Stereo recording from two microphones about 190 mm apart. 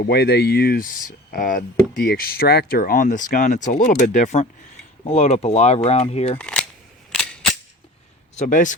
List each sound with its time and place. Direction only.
0.0 s speech: 55° left (ahead or behind); by 6.4 s 30° left (ahead or behind)
6.4 s camera: 5° left (ahead or behind)
8.4 s speech: 45° left (ahead or behind)